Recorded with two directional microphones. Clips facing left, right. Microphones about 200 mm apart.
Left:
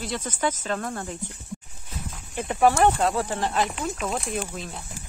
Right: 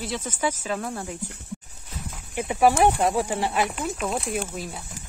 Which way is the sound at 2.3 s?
10° right (ahead or behind).